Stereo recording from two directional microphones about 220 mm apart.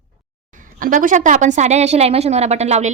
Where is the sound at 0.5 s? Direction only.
40° right (ahead or behind).